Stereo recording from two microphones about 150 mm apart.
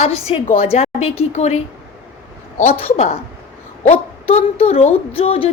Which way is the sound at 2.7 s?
40° left (ahead or behind).